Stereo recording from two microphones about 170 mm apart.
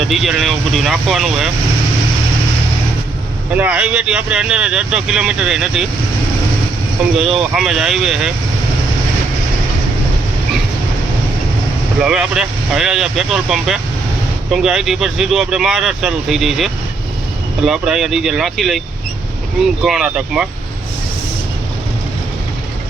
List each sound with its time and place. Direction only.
0.1 s speech: centre (ahead or behind)
3.5 s speech: 10° right (ahead or behind)
7.2 s speech: centre (ahead or behind)
12.0 s speech: 5° right (ahead or behind)
19.8 s speech: 5° right (ahead or behind)